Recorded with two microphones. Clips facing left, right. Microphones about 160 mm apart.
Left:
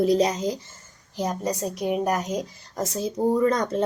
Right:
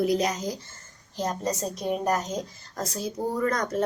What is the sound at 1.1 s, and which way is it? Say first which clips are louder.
A woman's voice: left 2 dB; 10° left (ahead or behind).